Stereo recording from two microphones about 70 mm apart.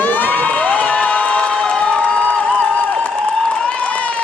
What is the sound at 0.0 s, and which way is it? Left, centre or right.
Crowd, left.